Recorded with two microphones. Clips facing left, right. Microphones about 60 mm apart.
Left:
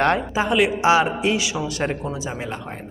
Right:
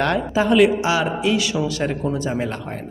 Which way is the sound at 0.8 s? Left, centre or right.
Left.